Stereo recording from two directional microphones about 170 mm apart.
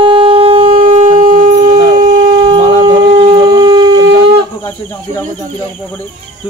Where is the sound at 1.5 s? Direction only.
25° right (ahead or behind).